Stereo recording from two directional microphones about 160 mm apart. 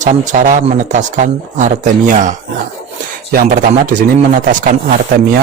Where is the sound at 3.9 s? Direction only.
55° right (ahead or behind).